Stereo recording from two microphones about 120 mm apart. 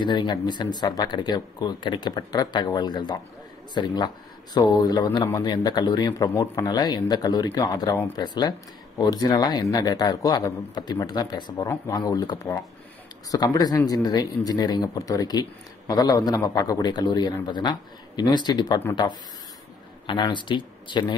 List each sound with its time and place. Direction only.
0.0 s speech: 40° left (ahead or behind)
20.1 s speech: 40° left (ahead or behind)